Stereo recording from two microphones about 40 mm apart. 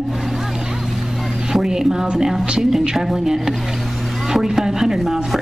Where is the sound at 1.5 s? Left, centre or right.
Centre.